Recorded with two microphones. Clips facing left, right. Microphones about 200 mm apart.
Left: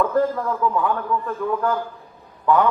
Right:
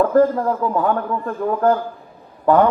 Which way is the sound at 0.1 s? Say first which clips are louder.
Right 5 dB; 40° right (ahead or behind).